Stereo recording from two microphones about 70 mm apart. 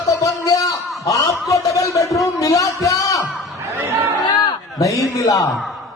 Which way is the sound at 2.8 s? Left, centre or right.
Left.